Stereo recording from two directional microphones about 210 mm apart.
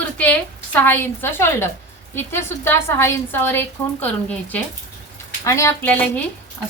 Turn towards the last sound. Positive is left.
turn(degrees=10)  # may be behind; listen again after turning